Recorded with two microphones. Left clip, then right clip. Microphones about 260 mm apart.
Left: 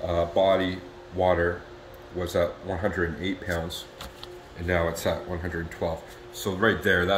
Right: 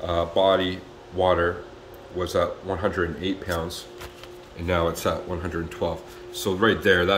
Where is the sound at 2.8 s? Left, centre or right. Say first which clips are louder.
Right 2 dB; right.